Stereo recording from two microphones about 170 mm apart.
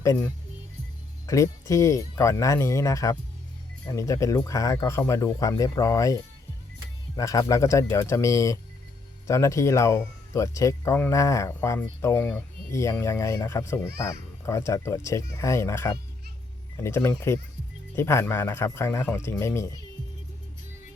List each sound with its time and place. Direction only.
0.0 s speech: 20° left (ahead or behind)
1.3 s speech: 20° left (ahead or behind)